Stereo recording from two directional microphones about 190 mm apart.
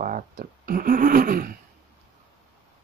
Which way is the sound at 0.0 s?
50° right (ahead or behind).